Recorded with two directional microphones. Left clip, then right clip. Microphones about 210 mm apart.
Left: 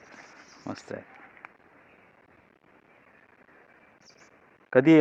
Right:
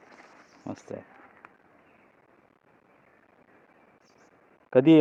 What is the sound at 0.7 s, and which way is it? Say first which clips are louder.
Speech: left 1 dB; 5° right (ahead or behind).